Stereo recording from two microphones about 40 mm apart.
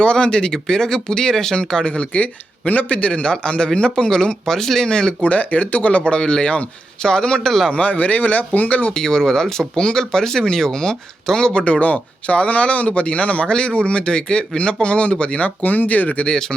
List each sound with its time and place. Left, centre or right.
0.0 s speech: left
1.8 s speech: left
5.2 s speech: left
7.7 s speech: left
8.9 s speech: centre
11.6 s speech: left
16.3 s speech: left